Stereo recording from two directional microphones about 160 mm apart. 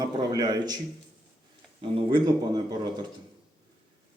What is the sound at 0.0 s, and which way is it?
Speech, 25° right (ahead or behind).